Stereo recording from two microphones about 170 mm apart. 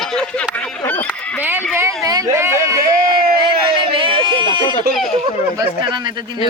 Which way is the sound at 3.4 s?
30° right (ahead or behind).